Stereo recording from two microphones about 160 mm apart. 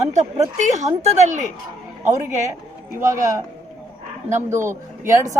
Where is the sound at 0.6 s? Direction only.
45° right (ahead or behind).